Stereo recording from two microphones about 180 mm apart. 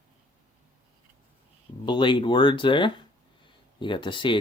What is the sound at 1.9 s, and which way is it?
Speech, 25° left (ahead or behind).